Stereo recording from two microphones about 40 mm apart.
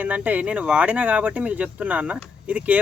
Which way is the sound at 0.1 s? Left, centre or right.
Right.